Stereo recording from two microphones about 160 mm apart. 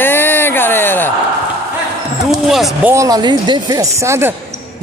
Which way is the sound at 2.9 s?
20° right (ahead or behind).